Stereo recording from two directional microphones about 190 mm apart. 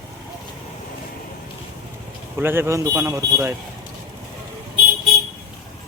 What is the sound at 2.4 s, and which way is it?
A man's voice, 10° right (ahead or behind).